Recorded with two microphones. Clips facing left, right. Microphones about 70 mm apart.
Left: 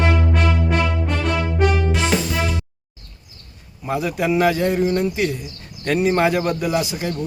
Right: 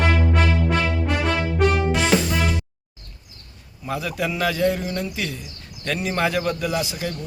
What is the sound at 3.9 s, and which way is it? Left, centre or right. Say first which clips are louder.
Speech: left 5 dB; centre.